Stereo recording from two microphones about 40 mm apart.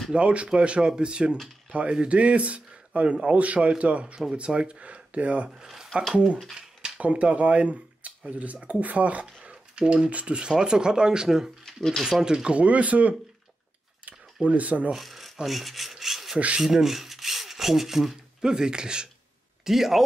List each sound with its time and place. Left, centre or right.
0.1 s speech: right
9.5 s speech: right
11.6 s speech: centre
12.0 s speech: centre
12.5 s speech: right
14.0 s a sound: right
15.0 s filing: centre
15.4 s rub: centre
16.6 s speech: centre
18.4 s speech: centre
19.6 s speech: centre